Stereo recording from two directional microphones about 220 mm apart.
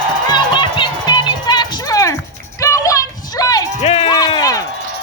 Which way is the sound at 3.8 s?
25° left (ahead or behind).